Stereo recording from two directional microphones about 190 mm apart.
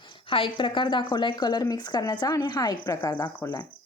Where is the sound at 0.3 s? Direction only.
25° left (ahead or behind).